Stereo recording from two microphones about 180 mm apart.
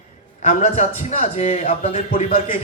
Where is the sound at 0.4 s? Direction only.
40° left (ahead or behind).